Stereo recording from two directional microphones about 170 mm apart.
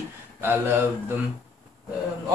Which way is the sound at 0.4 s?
10° right (ahead or behind).